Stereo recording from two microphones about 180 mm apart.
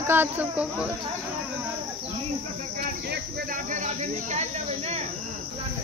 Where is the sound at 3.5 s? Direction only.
45° right (ahead or behind).